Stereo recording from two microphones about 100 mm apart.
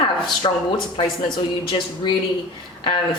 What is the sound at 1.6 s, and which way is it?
Speech, 55° left (ahead or behind).